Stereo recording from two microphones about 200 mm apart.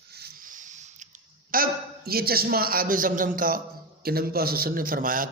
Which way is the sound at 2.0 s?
50° right (ahead or behind).